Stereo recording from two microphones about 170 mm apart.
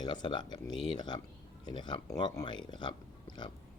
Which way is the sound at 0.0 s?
25° left (ahead or behind).